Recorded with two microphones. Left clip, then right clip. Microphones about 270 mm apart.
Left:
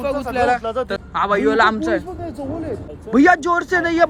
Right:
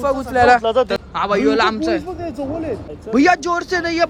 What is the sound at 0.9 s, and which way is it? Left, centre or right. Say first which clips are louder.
A man's voice: even; centre.